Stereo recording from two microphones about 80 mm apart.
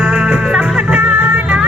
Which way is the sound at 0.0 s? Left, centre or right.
Centre.